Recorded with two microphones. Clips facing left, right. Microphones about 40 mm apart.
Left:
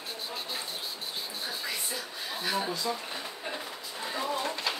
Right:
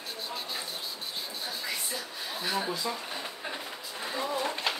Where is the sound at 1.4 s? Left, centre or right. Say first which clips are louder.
Even; centre.